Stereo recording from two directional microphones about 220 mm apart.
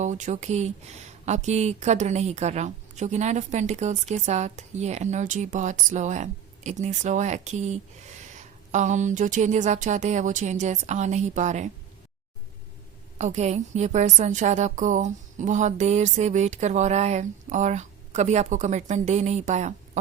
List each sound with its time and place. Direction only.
0.0 s a woman's voice: 35° right (ahead or behind)
13.1 s a woman's voice: 30° right (ahead or behind)